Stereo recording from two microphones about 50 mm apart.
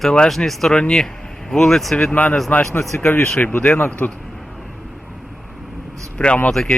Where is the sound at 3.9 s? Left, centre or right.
Left.